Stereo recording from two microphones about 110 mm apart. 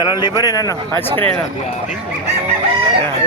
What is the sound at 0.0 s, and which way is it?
Speech, 40° left (ahead or behind).